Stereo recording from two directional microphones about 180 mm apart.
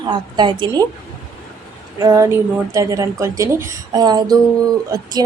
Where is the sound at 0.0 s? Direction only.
25° right (ahead or behind).